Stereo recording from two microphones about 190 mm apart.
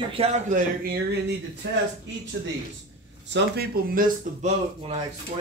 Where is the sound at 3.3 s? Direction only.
55° right (ahead or behind).